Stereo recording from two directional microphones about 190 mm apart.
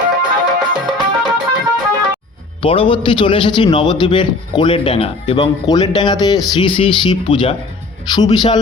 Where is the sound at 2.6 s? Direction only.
30° left (ahead or behind).